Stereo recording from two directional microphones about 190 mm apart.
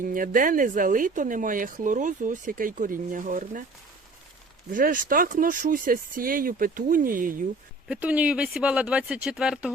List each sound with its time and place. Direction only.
0.0 s speech: 45° right (ahead or behind)
4.7 s speech: 45° right (ahead or behind)
7.9 s speech: 5° right (ahead or behind)